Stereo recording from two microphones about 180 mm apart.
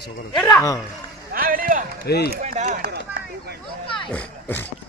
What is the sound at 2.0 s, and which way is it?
Speech, 65° left (ahead or behind).